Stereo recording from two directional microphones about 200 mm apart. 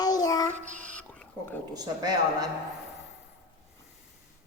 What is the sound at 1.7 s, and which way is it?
Speech, 20° right (ahead or behind).